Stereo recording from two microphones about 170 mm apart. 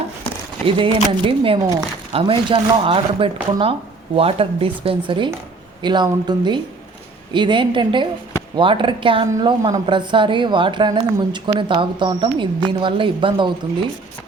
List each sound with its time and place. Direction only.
0.6 s a woman's voice: 30° right (ahead or behind)